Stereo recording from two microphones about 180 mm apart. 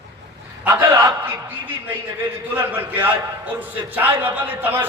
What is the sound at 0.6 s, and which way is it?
Speech, 10° right (ahead or behind).